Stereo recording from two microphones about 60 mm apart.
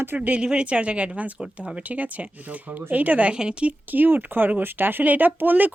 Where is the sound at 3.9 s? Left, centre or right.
Right.